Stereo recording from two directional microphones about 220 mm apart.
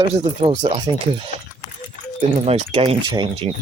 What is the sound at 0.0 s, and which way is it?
Speech, 25° right (ahead or behind).